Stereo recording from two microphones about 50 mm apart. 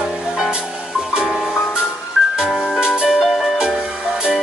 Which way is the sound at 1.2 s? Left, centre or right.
Centre.